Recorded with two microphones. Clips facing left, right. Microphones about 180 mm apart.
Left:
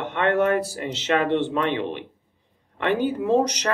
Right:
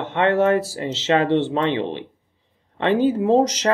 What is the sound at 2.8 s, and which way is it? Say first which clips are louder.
Speech: right 5 dB; 25° right (ahead or behind).